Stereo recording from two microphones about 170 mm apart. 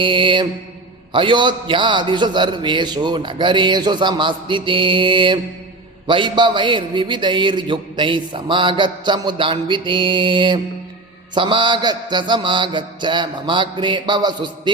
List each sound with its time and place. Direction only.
0.0 s mantra: 30° right (ahead or behind)
1.1 s a man's voice: 30° right (ahead or behind)